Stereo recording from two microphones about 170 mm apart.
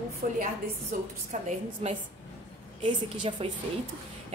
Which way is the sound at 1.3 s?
40° right (ahead or behind).